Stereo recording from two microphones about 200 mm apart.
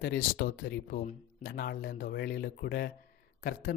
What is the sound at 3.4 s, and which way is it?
Speech, 40° left (ahead or behind).